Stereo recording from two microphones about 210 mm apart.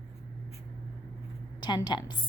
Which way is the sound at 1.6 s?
20° left (ahead or behind).